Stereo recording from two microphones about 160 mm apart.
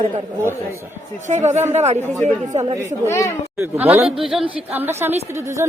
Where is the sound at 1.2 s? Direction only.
50° right (ahead or behind).